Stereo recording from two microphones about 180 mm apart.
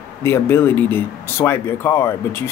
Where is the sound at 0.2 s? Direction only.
15° left (ahead or behind).